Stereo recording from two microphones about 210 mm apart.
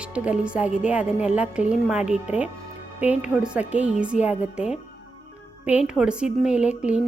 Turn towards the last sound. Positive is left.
turn(degrees=-5)  # may be behind; listen again after turning